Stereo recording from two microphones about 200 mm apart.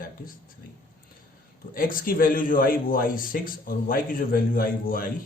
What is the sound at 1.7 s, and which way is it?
A man's voice, 45° left (ahead or behind).